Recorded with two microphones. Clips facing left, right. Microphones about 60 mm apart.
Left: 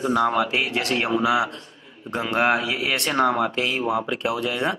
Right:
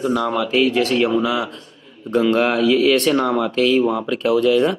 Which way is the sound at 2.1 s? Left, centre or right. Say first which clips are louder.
Right 5 dB; left.